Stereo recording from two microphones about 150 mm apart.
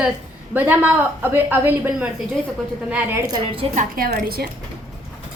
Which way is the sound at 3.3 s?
35° right (ahead or behind).